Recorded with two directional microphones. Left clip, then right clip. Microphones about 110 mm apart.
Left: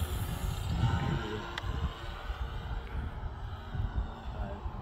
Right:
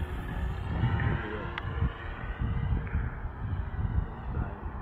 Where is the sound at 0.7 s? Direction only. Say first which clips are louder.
Right 2 dB; 40° left (ahead or behind).